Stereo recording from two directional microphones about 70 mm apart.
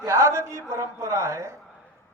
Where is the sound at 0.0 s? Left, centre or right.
Right.